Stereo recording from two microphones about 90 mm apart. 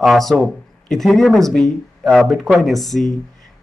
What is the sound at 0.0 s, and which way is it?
Speech, centre (ahead or behind).